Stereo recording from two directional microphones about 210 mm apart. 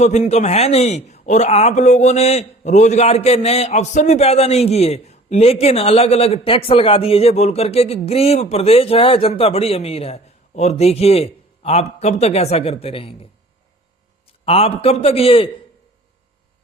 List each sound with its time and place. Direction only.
0.0 s a man's voice: 30° left (ahead or behind)
14.4 s a man's voice: 25° left (ahead or behind)